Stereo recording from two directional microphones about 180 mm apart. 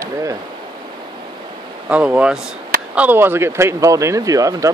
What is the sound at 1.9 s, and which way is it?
Speech, 5° right (ahead or behind).